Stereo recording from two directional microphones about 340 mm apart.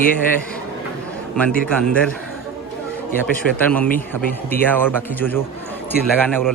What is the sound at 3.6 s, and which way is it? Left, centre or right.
A man's voice, centre.